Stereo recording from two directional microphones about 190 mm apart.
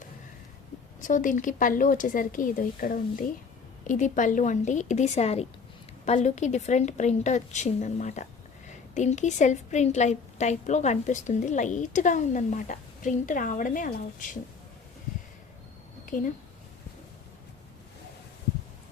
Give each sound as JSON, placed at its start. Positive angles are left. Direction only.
{"t": 1.0, "sound": "a woman's voice", "side_deg": 45}
{"t": 16.0, "sound": "a woman's voice", "side_deg": 45}